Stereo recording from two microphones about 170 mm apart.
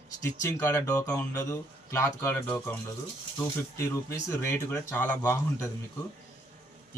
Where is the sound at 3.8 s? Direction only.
15° left (ahead or behind).